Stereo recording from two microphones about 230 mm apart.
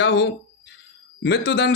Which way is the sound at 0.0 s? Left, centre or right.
Left.